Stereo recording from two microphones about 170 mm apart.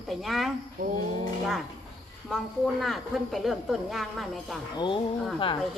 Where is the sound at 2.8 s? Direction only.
Centre (ahead or behind).